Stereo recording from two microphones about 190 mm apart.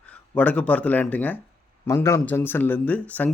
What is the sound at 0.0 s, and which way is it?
Speech, 5° left (ahead or behind).